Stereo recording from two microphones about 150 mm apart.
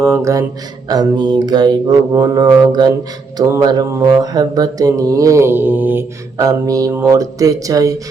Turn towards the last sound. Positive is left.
turn(degrees=-25)  # may be behind; listen again after turning